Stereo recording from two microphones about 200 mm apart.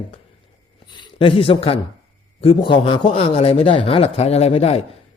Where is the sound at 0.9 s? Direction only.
25° left (ahead or behind).